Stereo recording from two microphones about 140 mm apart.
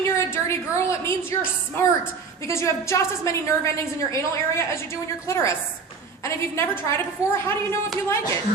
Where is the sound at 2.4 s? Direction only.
20° left (ahead or behind).